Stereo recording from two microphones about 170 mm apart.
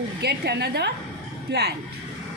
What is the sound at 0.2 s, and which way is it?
A woman's voice, 75° right (ahead or behind).